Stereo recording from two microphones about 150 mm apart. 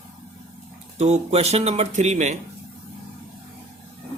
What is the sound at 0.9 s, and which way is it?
Speech, 45° right (ahead or behind).